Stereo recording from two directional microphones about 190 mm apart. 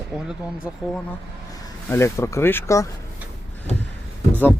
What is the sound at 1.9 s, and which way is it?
Speech, 15° left (ahead or behind).